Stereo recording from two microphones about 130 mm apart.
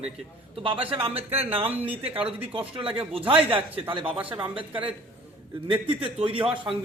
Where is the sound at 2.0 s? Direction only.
45° right (ahead or behind).